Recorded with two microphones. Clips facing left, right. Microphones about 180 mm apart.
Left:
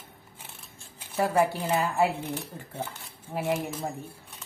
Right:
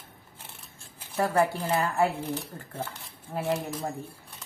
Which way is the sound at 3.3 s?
5° left (ahead or behind).